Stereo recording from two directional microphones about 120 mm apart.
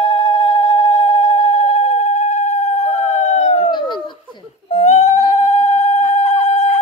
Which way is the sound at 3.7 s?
40° left (ahead or behind).